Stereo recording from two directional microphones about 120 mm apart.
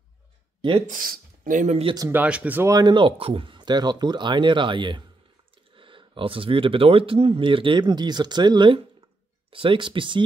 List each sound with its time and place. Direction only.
0.6 s speech: 45° right (ahead or behind)
1.5 s speech: 90° right
2.1 s speech: 10° right (ahead or behind)
2.7 s speech: 35° right (ahead or behind)